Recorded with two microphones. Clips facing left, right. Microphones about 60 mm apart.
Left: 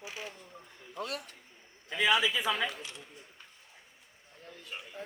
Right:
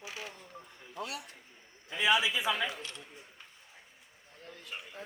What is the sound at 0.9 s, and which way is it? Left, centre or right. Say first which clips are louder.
A man's voice: left 2 dB; left.